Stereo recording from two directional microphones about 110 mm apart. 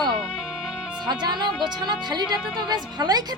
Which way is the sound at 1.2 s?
40° right (ahead or behind).